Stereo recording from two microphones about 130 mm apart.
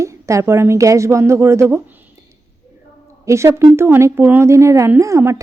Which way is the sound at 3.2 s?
20° right (ahead or behind).